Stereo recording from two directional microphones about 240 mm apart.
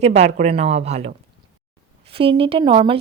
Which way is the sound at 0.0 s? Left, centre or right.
Right.